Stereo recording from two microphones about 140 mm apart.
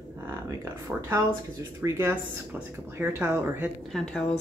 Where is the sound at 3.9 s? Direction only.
5° left (ahead or behind).